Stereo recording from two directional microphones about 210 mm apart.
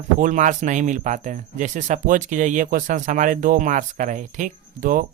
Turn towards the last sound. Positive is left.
turn(degrees=-40)  # may be behind; listen again after turning